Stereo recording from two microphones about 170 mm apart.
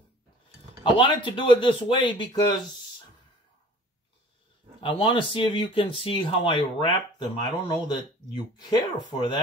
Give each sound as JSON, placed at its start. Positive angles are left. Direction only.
{"t": 0.8, "sound": "speech", "side_deg": 30}
{"t": 4.7, "sound": "speech", "side_deg": 30}